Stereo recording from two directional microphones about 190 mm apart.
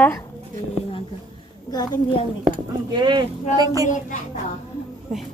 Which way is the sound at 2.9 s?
25° right (ahead or behind).